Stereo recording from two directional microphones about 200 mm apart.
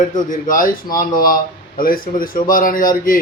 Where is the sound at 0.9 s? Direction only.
45° left (ahead or behind).